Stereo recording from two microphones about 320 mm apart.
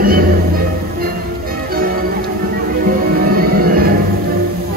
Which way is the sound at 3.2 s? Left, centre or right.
Right.